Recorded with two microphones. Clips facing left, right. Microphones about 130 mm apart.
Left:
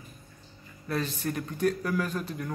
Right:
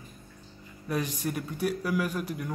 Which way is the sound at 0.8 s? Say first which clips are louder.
Even; 15° right (ahead or behind).